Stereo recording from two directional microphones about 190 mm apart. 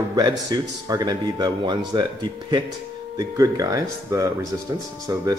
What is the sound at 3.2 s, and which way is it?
Speech, 20° right (ahead or behind).